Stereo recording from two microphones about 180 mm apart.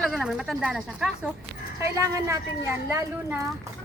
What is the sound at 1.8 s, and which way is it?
A woman's voice, 15° right (ahead or behind).